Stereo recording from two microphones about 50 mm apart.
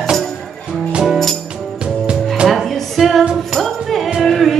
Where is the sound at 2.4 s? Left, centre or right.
Centre.